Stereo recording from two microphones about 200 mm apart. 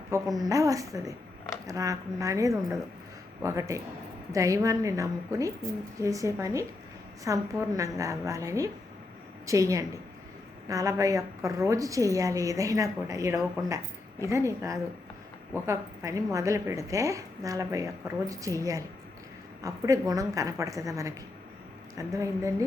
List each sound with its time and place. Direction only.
0.1 s a woman's voice: 15° right (ahead or behind)